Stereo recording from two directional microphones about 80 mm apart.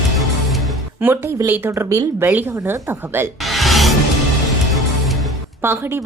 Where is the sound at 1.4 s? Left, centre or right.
Right.